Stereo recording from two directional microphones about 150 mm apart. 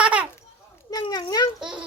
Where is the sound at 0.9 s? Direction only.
25° left (ahead or behind).